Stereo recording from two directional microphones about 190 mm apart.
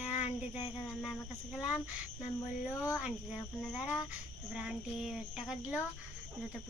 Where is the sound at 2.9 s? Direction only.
5° right (ahead or behind).